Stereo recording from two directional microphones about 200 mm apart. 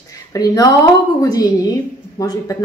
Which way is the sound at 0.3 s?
20° left (ahead or behind).